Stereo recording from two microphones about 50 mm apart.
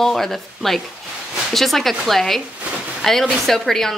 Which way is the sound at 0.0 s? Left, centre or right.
Centre.